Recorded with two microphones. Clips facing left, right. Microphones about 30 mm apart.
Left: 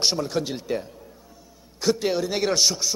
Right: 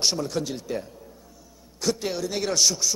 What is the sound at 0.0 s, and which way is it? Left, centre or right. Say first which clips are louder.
A man's voice: left 2 dB; centre.